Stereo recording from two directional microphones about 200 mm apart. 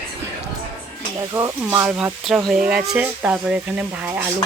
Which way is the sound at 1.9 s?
5° right (ahead or behind).